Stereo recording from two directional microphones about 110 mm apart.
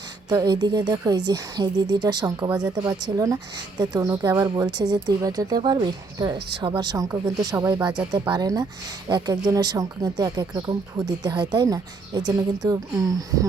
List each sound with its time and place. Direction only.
0.3 s a woman's voice: 40° right (ahead or behind)
7.7 s a woman's voice: 40° right (ahead or behind)